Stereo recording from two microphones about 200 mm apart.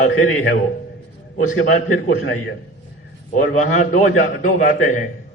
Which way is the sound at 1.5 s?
90° left.